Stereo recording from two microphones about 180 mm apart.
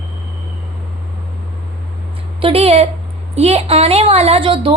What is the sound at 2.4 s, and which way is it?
A woman's voice, 30° right (ahead or behind).